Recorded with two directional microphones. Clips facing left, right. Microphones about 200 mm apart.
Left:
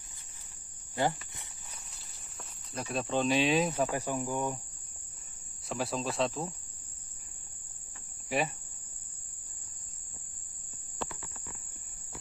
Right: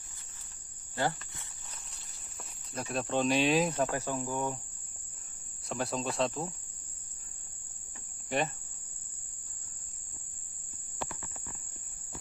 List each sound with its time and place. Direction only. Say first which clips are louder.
0.9 s speech: left 2 dB; 15° left (ahead or behind)
2.3 s speech: even; centre (ahead or behind)
3.9 s cricket: left 1 dB; 10° left (ahead or behind)
5.7 s speech: even; centre (ahead or behind)
8.3 s cricket: even; 5° left (ahead or behind)